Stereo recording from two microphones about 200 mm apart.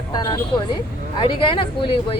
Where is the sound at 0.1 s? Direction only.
20° left (ahead or behind).